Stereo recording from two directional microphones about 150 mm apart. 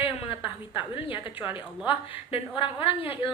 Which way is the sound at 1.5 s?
35° left (ahead or behind).